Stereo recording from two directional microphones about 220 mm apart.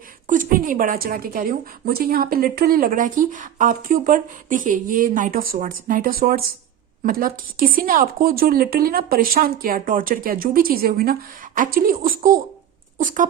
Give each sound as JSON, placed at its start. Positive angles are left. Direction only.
{"t": 0.3, "sound": "a woman's voice", "side_deg": -35}